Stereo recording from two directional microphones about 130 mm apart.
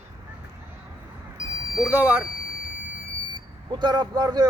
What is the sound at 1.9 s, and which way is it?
Speech, 15° right (ahead or behind).